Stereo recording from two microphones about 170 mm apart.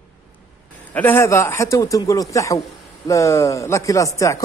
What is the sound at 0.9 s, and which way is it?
Speech, 10° left (ahead or behind).